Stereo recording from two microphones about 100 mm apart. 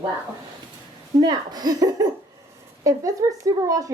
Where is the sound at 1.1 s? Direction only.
45° right (ahead or behind).